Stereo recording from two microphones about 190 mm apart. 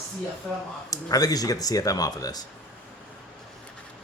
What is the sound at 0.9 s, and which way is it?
Speech, 20° left (ahead or behind).